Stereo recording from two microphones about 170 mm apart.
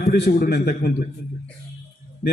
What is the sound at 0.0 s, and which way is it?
A man's voice, 65° left (ahead or behind).